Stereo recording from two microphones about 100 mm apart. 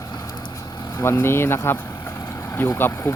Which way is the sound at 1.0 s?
25° left (ahead or behind).